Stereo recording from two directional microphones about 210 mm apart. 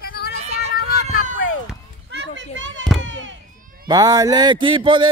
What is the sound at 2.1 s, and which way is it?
Children playing, 55° right (ahead or behind).